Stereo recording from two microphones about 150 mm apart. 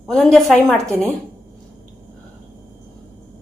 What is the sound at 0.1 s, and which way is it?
Speech, 5° left (ahead or behind).